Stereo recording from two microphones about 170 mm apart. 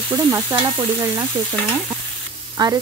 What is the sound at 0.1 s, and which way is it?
Stir, 20° right (ahead or behind).